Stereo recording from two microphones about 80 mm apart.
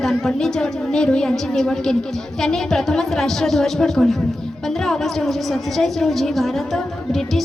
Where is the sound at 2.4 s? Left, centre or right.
Centre.